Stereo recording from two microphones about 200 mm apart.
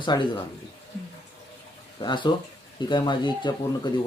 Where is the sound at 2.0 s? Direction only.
20° left (ahead or behind).